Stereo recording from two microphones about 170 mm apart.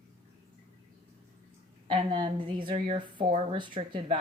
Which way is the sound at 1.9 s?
25° right (ahead or behind).